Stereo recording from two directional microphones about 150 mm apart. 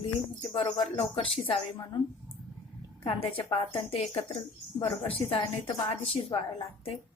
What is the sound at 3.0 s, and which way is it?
Speech, 40° left (ahead or behind).